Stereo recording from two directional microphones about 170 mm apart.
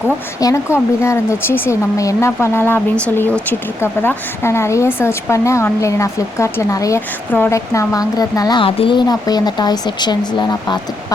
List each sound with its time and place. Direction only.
0.3 s speech: 20° left (ahead or behind)